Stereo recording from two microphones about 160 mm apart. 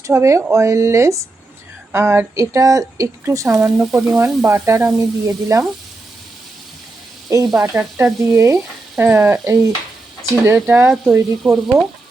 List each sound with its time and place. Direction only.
0.1 s a woman's voice: 20° right (ahead or behind)
7.3 s a woman's voice: 20° right (ahead or behind)